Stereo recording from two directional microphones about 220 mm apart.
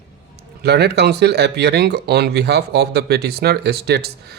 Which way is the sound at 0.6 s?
50° right (ahead or behind).